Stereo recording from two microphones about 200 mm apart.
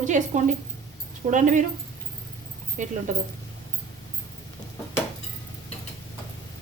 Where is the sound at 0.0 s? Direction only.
40° right (ahead or behind).